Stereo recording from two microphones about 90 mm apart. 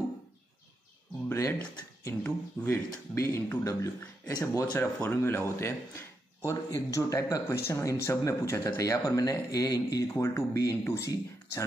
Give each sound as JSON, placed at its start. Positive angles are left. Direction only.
{"t": 1.3, "sound": "speech", "side_deg": 30}
{"t": 4.7, "sound": "speech", "side_deg": 25}